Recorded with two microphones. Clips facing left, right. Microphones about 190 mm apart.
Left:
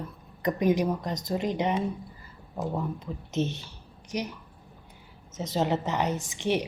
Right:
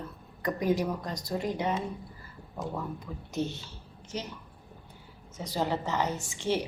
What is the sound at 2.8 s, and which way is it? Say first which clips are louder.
A woman's voice: left 4 dB; 20° left (ahead or behind).